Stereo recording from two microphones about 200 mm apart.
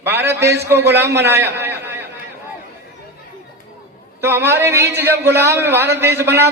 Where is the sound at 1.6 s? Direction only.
10° right (ahead or behind).